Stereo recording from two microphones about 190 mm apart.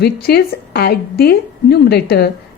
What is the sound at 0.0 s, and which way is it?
A woman's voice, 55° left (ahead or behind).